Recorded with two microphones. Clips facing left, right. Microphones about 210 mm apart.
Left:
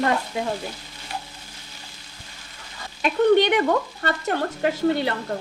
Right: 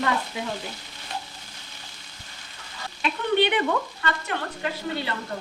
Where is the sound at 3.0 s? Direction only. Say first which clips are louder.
Left 6 dB; 45° left (ahead or behind).